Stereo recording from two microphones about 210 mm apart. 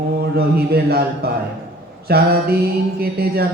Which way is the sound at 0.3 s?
50° right (ahead or behind).